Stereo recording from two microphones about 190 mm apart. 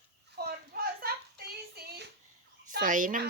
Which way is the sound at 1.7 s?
55° right (ahead or behind).